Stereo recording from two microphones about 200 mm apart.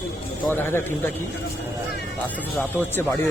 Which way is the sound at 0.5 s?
10° left (ahead or behind).